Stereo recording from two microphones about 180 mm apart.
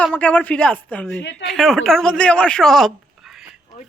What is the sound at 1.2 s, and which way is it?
Speech, 85° left.